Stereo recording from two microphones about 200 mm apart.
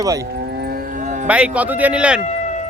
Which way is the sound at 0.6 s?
45° right (ahead or behind).